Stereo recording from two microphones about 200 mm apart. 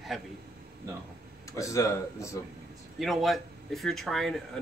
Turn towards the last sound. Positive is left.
turn(degrees=0)  # may be behind; listen again after turning